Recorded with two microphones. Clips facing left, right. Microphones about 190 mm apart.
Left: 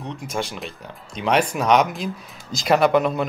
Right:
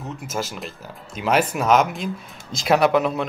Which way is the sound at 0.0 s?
5° right (ahead or behind).